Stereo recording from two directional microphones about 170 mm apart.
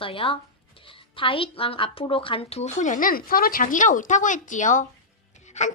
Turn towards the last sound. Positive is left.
turn(degrees=45)  # may be behind; listen again after turning